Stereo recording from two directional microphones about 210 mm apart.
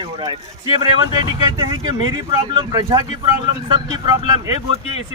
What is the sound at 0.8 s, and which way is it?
Speech, 20° right (ahead or behind).